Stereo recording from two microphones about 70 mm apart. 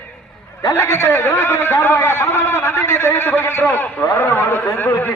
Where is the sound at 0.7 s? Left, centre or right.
Left.